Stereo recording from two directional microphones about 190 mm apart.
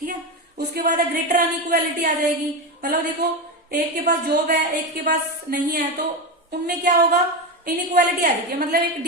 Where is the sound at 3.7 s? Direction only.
55° right (ahead or behind).